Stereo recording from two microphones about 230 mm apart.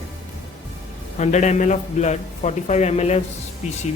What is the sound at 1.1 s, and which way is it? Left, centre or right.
A man's voice, left.